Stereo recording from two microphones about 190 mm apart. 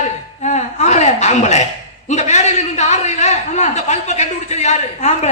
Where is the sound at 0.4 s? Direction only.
35° left (ahead or behind).